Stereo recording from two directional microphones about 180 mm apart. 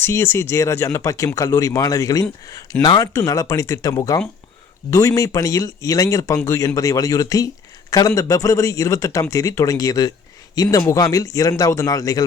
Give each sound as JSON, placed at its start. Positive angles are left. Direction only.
{"t": 0.0, "sound": "a man's voice", "side_deg": 15}